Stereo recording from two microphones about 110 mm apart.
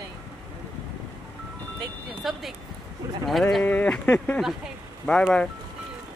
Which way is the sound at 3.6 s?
15° left (ahead or behind).